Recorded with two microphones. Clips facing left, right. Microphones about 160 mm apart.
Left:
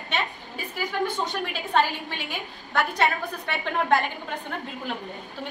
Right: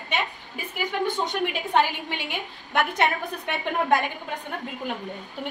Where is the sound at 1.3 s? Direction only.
20° right (ahead or behind).